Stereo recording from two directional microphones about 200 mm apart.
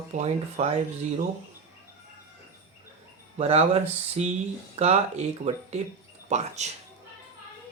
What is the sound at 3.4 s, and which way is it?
Speech, 30° right (ahead or behind).